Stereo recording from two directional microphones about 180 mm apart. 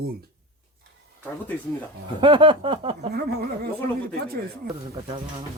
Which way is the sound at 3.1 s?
60° right (ahead or behind).